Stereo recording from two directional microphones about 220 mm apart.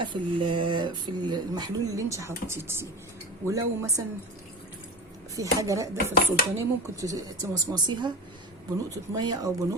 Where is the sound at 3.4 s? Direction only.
15° right (ahead or behind).